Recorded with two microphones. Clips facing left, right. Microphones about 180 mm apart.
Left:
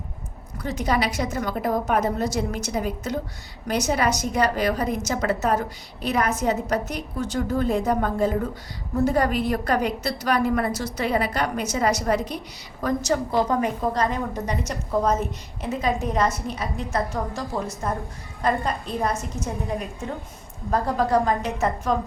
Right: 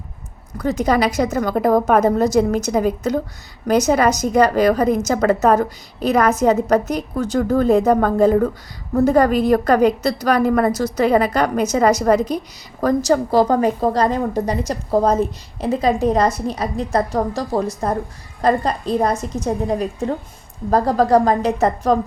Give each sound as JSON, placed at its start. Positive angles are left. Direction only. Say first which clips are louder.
{"t": 0.6, "sound": "a woman's voice", "louder": "right 7 dB", "side_deg": -40}